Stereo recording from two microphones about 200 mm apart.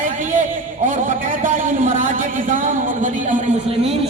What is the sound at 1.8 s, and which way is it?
A man's voice, 40° right (ahead or behind).